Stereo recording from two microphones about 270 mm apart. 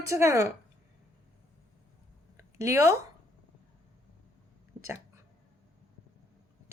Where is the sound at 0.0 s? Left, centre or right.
Centre.